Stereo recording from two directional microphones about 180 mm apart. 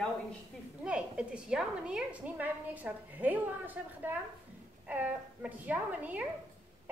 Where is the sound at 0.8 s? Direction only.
5° right (ahead or behind).